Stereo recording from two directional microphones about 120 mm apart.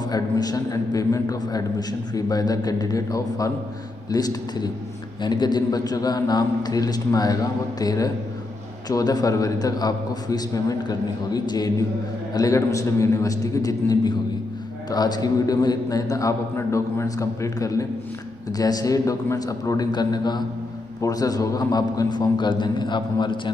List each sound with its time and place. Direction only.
0.0 s a man's voice: 35° left (ahead or behind)